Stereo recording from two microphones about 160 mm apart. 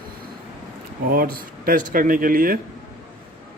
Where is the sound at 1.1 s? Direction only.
65° right (ahead or behind).